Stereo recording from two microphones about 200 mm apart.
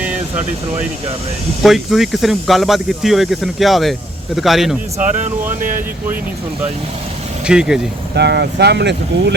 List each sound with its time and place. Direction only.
0.0 s vehicle: 5° right (ahead or behind)
1.6 s speech: centre (ahead or behind)
5.5 s speech: 40° right (ahead or behind)
7.4 s speech: 5° right (ahead or behind)
8.1 s speech: 55° right (ahead or behind)